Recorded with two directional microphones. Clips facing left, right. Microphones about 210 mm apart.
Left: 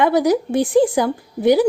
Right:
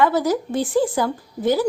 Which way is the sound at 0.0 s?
15° left (ahead or behind).